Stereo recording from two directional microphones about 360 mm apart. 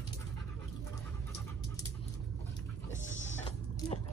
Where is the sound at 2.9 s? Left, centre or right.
Centre.